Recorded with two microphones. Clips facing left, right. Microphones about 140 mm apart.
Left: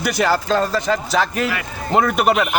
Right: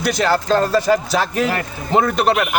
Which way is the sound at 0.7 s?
10° right (ahead or behind).